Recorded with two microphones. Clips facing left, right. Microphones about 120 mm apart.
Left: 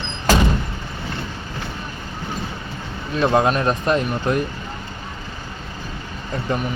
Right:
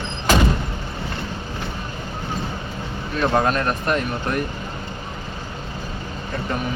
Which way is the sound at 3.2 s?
20° left (ahead or behind).